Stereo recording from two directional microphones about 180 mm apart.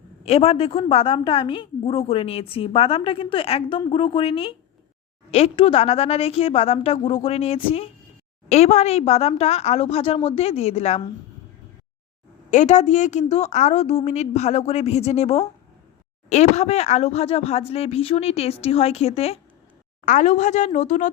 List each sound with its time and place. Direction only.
0.3 s a woman's voice: 35° left (ahead or behind)
12.5 s a woman's voice: 40° left (ahead or behind)